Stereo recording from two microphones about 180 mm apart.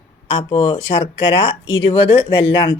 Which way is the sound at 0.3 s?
30° left (ahead or behind).